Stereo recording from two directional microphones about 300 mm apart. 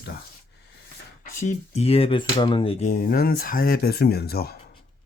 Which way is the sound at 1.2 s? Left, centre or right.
Left.